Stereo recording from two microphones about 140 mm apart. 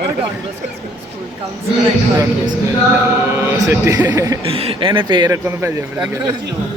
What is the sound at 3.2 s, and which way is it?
Speech, 15° right (ahead or behind).